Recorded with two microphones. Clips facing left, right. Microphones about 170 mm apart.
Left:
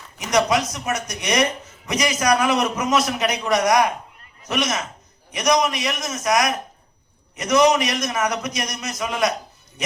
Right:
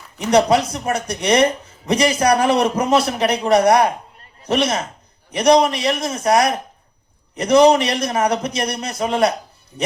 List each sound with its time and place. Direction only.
0.2 s speech: 30° right (ahead or behind)